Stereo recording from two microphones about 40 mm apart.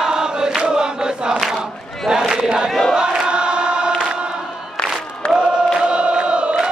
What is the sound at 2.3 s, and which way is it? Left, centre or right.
Battle cry, centre.